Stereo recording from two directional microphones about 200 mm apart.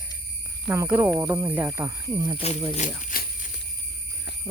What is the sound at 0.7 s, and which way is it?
Speech, 10° right (ahead or behind).